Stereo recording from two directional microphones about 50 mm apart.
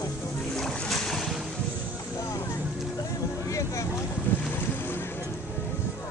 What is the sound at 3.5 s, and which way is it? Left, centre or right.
Vehicle, left.